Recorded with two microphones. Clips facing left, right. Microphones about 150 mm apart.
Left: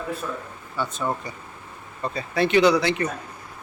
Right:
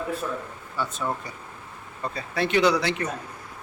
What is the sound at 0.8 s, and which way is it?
Speech, centre (ahead or behind).